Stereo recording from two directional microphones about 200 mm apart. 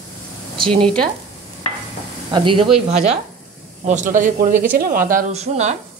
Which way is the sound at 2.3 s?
25° right (ahead or behind).